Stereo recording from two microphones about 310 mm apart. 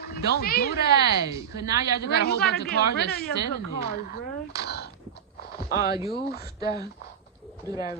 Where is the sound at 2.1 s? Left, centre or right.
Left.